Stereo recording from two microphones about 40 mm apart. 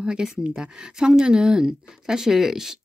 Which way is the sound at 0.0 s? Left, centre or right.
Right.